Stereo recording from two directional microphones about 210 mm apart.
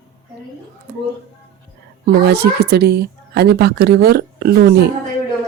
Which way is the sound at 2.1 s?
50° right (ahead or behind).